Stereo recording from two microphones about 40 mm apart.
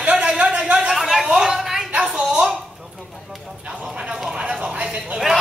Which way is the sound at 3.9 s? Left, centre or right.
Right.